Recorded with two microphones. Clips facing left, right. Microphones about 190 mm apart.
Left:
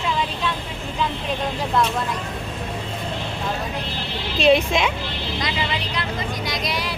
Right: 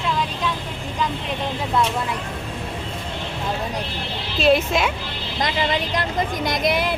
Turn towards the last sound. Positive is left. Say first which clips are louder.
# right 5 dB
turn(degrees=-50)  # may be behind; listen again after turning